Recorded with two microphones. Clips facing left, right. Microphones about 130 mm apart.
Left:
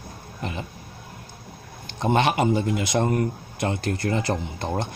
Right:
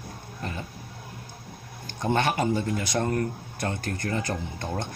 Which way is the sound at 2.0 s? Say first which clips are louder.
Left 4 dB; 20° left (ahead or behind).